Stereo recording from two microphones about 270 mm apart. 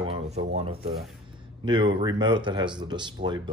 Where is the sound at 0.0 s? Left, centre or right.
Right.